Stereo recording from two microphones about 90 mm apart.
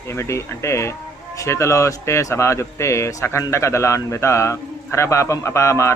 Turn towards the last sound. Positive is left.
turn(degrees=30)  # may be behind; listen again after turning